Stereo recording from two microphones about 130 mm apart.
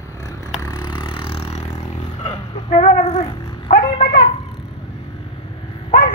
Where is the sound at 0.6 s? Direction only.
30° left (ahead or behind); by 1.7 s 50° left (ahead or behind).